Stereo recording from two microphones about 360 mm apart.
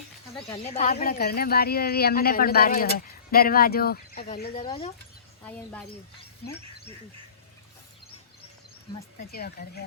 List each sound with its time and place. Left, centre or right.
0.5 s speech: centre
9.1 s speech: left